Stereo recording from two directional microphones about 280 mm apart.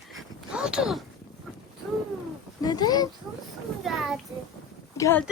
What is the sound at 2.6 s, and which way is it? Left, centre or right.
Speech, centre.